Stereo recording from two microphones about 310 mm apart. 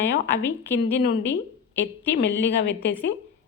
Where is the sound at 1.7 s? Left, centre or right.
Left.